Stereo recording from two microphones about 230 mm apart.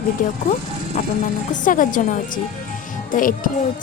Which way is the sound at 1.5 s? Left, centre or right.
Left.